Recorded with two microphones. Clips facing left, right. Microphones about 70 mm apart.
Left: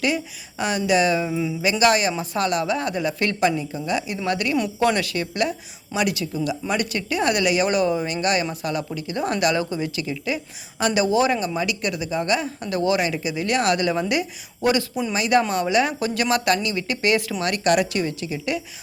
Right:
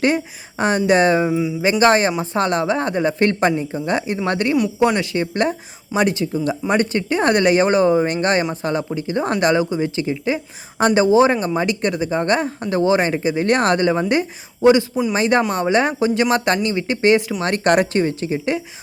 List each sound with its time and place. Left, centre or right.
0.6 s speech: right
1.3 s speech: centre
1.8 s speech: right
4.8 s speech: right
12.6 s speech: right